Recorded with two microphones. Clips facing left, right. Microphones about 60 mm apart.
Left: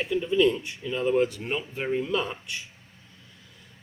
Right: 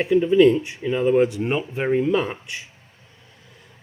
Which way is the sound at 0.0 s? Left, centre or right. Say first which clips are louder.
Right 8 dB; right.